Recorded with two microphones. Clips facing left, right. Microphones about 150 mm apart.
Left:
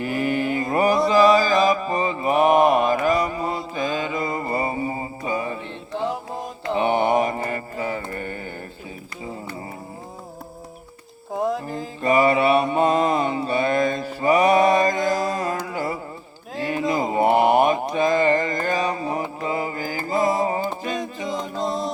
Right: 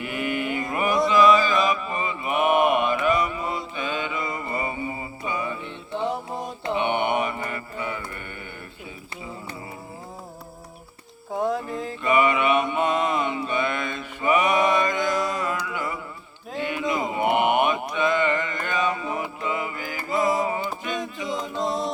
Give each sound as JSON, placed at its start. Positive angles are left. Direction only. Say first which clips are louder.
{"t": 0.0, "sound": "mantra", "louder": "left 5 dB", "side_deg": 35}
{"t": 6.0, "sound": "music", "louder": "left 1 dB", "side_deg": 0}
{"t": 6.7, "sound": "mantra", "louder": "left 5 dB", "side_deg": 35}
{"t": 11.3, "sound": "music", "louder": "left 1 dB", "side_deg": 0}
{"t": 12.0, "sound": "mantra", "louder": "left 3 dB", "side_deg": 35}
{"t": 21.2, "sound": "a capella", "louder": "left 1 dB", "side_deg": 0}